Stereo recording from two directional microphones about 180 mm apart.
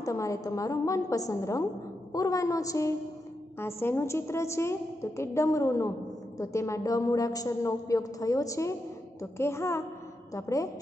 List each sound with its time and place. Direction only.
0.0 s a woman's voice: 15° left (ahead or behind)